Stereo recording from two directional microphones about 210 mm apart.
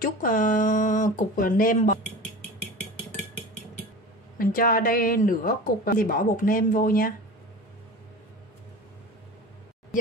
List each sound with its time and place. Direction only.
0.0 s speech: 40° left (ahead or behind)
4.4 s speech: 40° left (ahead or behind)